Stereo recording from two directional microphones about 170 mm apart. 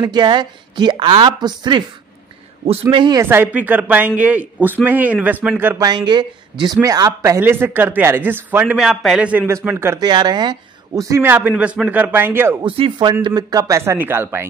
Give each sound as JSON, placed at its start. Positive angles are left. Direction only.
{"t": 0.0, "sound": "speech", "side_deg": -25}
{"t": 2.9, "sound": "speech", "side_deg": -30}
{"t": 3.2, "sound": "a man's voice", "side_deg": -15}
{"t": 5.9, "sound": "a man's voice", "side_deg": -25}
{"t": 12.6, "sound": "a man's voice", "side_deg": -30}